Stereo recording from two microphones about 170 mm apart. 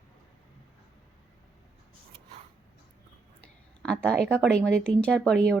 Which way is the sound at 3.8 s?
5° left (ahead or behind).